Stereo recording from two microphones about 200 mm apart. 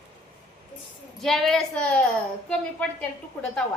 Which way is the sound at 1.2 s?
Centre (ahead or behind).